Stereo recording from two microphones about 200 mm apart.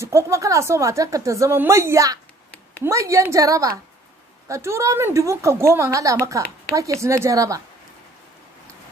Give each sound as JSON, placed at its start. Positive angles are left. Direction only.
{"t": 0.0, "sound": "a woman's voice", "side_deg": -15}